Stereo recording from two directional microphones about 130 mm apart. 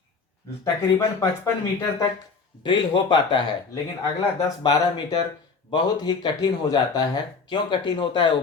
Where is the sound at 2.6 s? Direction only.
40° left (ahead or behind).